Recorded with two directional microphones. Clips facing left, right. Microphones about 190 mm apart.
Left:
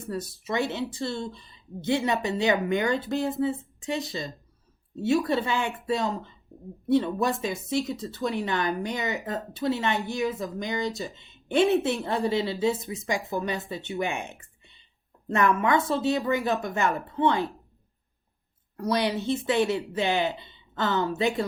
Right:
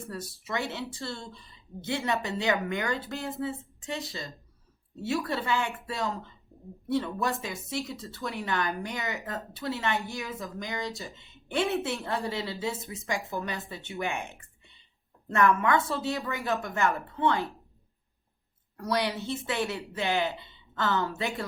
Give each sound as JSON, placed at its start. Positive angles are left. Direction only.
{"t": 0.1, "sound": "a woman's voice", "side_deg": 20}
{"t": 6.5, "sound": "whispering", "side_deg": 15}
{"t": 6.8, "sound": "speech", "side_deg": 20}
{"t": 15.3, "sound": "speech", "side_deg": 20}
{"t": 18.8, "sound": "speech", "side_deg": 20}